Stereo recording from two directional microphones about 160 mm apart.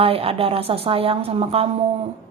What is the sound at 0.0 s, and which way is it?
A woman's voice, 35° right (ahead or behind).